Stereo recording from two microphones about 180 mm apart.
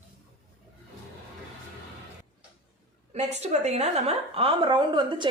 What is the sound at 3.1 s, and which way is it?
A woman's voice, 35° right (ahead or behind).